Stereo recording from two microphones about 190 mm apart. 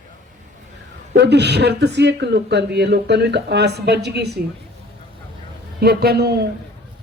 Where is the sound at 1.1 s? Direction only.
65° right (ahead or behind).